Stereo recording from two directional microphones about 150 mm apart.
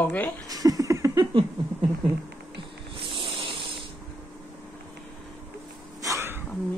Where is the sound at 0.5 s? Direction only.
25° right (ahead or behind).